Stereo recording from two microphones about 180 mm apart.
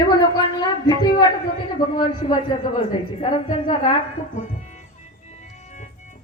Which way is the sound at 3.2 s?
40° left (ahead or behind).